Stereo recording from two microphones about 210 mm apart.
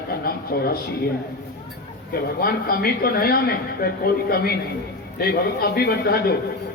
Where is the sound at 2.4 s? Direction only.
45° left (ahead or behind).